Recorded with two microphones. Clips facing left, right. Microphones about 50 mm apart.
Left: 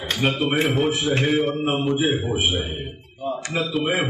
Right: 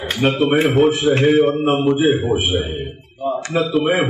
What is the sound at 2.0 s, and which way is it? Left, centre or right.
Speech, centre.